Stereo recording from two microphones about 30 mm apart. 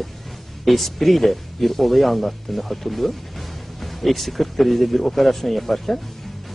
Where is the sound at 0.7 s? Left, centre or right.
Centre.